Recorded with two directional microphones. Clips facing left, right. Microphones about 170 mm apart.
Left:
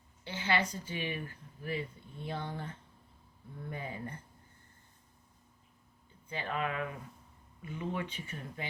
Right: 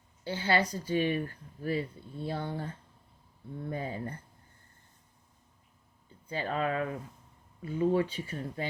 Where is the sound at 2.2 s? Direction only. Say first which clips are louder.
Right 4 dB; 35° right (ahead or behind).